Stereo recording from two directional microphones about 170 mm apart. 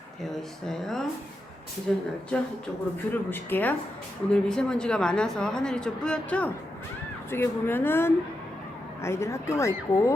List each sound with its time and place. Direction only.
0.3 s speech: centre (ahead or behind); by 10.1 s 20° left (ahead or behind)